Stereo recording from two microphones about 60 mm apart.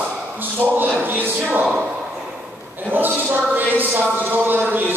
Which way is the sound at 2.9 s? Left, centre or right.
Right.